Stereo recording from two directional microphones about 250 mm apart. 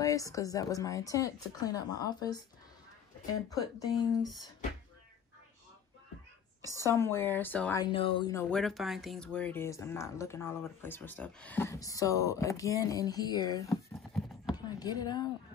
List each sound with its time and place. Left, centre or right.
0.0 s speech: centre
3.4 s speech: centre
6.6 s speech: centre
6.9 s speech: centre
7.8 s speech: left
13.9 s clip-clop: centre
14.5 s a sound: centre